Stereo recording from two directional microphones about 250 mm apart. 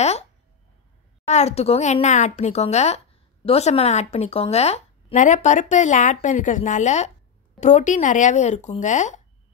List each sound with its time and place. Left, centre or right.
1.2 s speech: left